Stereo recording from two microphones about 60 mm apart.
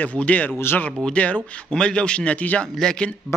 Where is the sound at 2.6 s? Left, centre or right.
Centre.